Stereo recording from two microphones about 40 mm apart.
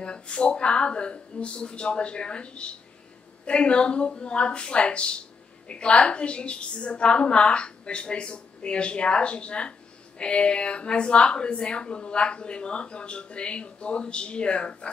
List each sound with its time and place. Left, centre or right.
0.0 s a woman's voice: left